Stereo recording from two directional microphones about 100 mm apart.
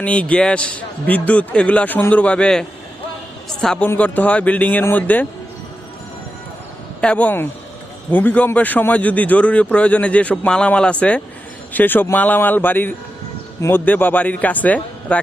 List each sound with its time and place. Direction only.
0.0 s a woman's voice: 15° left (ahead or behind)
3.8 s speech: 15° left (ahead or behind)
7.0 s a man's voice: 15° left (ahead or behind)